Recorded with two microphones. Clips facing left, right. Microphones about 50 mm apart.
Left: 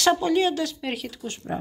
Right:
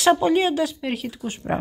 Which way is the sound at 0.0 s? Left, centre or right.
Right.